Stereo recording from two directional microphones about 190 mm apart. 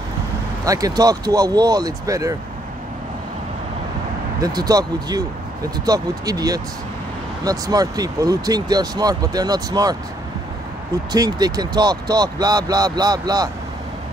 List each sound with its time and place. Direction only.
0.7 s speech: 20° right (ahead or behind)
4.4 s speech: 20° right (ahead or behind)
11.1 s speech: 20° right (ahead or behind)